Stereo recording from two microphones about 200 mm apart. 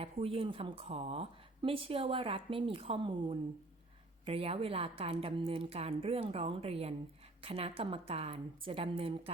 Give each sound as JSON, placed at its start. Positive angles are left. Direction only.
{"t": 0.0, "sound": "speech", "side_deg": -30}